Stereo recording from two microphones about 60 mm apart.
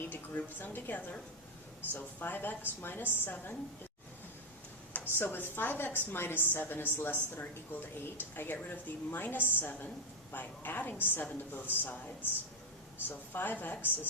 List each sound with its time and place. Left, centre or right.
0.0 s a woman's voice: left
4.9 s a woman's voice: left